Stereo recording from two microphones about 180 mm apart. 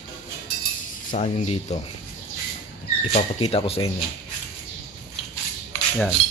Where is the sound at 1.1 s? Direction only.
40° left (ahead or behind).